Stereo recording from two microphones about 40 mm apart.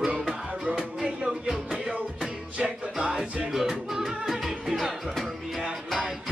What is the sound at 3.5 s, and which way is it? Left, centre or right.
Music, centre.